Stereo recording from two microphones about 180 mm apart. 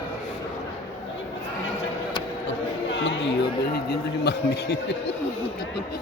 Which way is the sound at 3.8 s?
65° left (ahead or behind).